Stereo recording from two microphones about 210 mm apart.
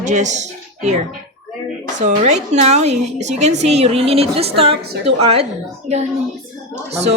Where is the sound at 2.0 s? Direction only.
35° right (ahead or behind).